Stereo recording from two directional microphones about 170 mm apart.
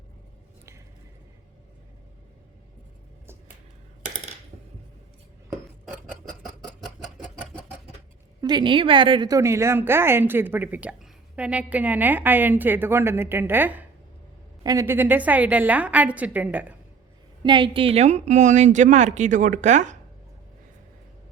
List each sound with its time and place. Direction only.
8.4 s a woman's voice: 25° right (ahead or behind); by 16.7 s 10° right (ahead or behind)
17.4 s a woman's voice: 30° right (ahead or behind); by 20.0 s 45° right (ahead or behind)